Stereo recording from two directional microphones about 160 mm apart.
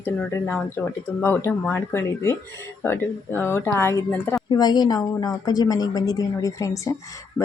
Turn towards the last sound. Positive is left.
turn(degrees=20)  # may be behind; listen again after turning